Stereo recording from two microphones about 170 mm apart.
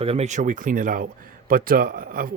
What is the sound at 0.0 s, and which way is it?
Speech, 35° right (ahead or behind).